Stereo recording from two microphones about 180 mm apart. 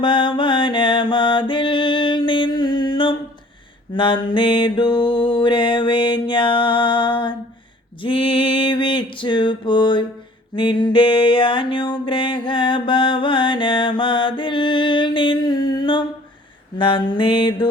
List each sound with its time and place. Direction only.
0.0 s mantra: 25° left (ahead or behind)
3.9 s music: 25° left (ahead or behind)